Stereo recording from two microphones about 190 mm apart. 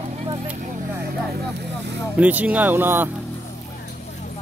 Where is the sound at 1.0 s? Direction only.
60° right (ahead or behind).